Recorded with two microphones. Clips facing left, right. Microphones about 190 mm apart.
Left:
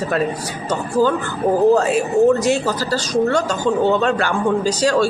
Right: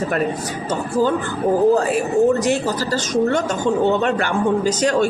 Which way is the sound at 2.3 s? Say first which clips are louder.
Left 1 dB; 15° right (ahead or behind).